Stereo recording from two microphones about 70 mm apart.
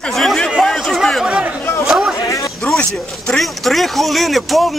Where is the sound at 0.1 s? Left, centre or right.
Centre.